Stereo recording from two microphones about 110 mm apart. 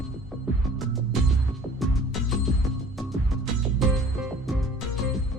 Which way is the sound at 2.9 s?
Centre (ahead or behind).